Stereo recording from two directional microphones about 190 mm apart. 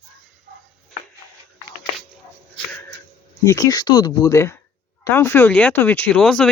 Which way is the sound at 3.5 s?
20° left (ahead or behind).